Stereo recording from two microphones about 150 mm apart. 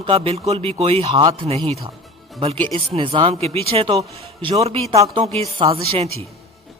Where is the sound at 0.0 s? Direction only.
40° right (ahead or behind).